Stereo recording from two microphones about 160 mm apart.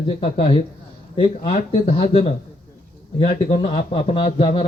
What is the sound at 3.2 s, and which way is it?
Speech, 40° left (ahead or behind).